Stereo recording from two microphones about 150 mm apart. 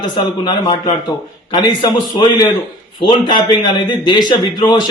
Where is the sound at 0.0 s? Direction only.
30° left (ahead or behind).